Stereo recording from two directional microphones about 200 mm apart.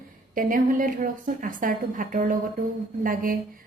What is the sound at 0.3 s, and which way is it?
A woman's voice, 45° right (ahead or behind).